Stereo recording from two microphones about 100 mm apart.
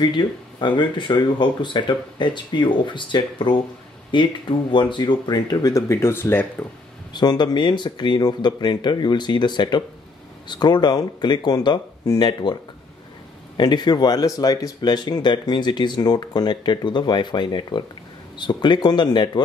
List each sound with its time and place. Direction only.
0.0 s speech: 50° left (ahead or behind)
5.7 s speech: 30° left (ahead or behind)
7.2 s speech: 45° left (ahead or behind)
13.6 s speech: 45° left (ahead or behind)